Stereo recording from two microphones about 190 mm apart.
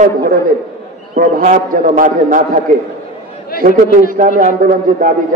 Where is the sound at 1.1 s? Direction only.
45° right (ahead or behind).